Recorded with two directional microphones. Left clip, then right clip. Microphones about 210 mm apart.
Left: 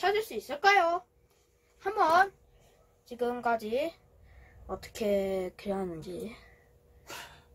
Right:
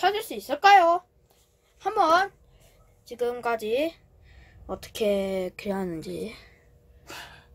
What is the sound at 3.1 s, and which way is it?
Speech, 35° right (ahead or behind).